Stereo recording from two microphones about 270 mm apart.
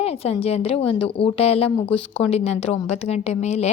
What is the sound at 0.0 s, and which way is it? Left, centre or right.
A woman's voice, left.